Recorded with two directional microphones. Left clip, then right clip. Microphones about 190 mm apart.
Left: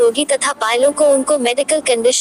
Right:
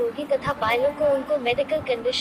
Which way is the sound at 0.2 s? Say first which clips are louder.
Left 7 dB; 55° left (ahead or behind).